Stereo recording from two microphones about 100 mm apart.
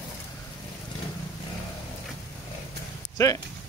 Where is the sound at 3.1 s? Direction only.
35° left (ahead or behind).